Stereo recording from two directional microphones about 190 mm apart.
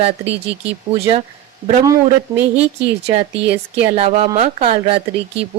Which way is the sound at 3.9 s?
30° right (ahead or behind).